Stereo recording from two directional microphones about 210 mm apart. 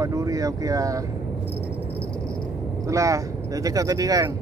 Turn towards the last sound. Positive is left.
turn(degrees=-15)  # may be behind; listen again after turning